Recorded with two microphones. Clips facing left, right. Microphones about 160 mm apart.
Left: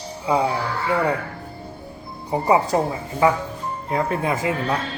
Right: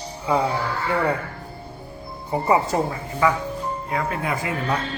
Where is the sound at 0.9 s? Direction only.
15° left (ahead or behind).